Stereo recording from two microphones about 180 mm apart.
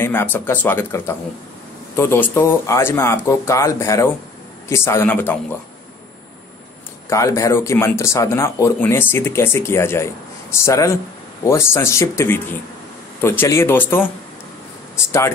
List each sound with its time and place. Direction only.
0.0 s speech: 10° left (ahead or behind)
7.1 s speech: 15° left (ahead or behind)